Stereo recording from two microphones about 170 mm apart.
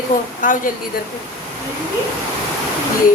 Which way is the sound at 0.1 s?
50° left (ahead or behind).